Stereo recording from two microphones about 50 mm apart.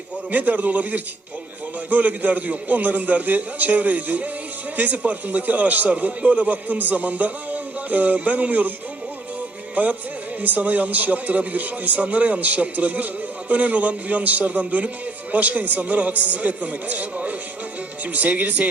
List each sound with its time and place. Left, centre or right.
0.3 s a man's voice: right
9.7 s a man's voice: right